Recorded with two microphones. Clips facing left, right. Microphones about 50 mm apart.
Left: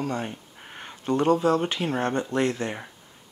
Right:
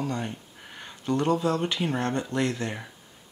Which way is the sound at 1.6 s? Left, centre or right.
Centre.